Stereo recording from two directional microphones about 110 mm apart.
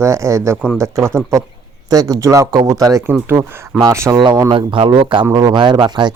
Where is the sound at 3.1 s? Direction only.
20° right (ahead or behind).